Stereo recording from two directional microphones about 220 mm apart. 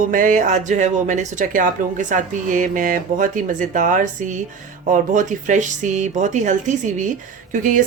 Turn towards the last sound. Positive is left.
turn(degrees=-35)  # may be behind; listen again after turning